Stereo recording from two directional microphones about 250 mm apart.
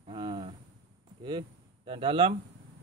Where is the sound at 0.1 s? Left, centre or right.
Right.